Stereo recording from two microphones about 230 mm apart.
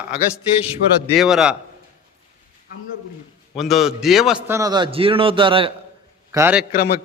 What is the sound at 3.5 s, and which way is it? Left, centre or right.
A man's voice, centre.